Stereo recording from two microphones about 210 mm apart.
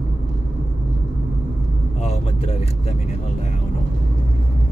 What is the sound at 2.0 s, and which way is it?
Speech, 30° left (ahead or behind).